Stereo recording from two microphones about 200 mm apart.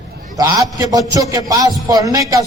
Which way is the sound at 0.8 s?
20° right (ahead or behind).